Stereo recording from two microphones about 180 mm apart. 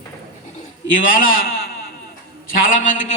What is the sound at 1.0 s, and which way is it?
A man's voice, 50° left (ahead or behind).